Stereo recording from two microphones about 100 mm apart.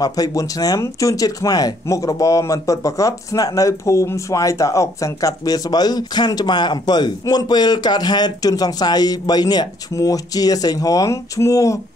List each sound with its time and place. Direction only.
0.0 s speech: 40° left (ahead or behind)